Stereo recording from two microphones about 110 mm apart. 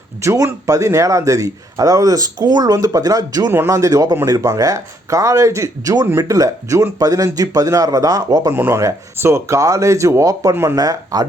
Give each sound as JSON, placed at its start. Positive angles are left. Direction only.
{"t": 0.2, "sound": "speech", "side_deg": -25}
{"t": 3.5, "sound": "speech", "side_deg": -25}
{"t": 8.5, "sound": "speech", "side_deg": -20}
{"t": 10.8, "sound": "speech", "side_deg": -35}